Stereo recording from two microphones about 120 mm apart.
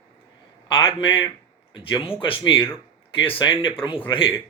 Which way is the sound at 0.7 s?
40° left (ahead or behind).